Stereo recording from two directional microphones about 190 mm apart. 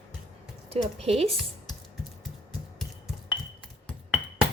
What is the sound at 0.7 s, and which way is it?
Speech, 30° right (ahead or behind).